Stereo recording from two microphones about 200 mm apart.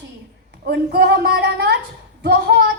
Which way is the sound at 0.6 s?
50° right (ahead or behind).